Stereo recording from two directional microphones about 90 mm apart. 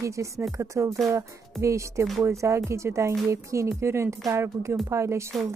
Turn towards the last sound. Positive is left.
turn(degrees=-30)  # may be behind; listen again after turning